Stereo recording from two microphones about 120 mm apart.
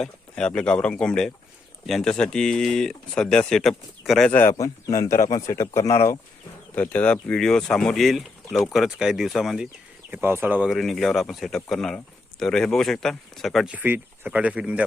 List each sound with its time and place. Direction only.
0.0 s speech: 5° left (ahead or behind)
4.3 s speech: 15° left (ahead or behind)
4.5 s speech: 30° left (ahead or behind)
6.7 s speech: 10° left (ahead or behind)
10.1 s speech: 20° right (ahead or behind)
10.7 s speech: centre (ahead or behind)
13.7 s speech: 15° right (ahead or behind)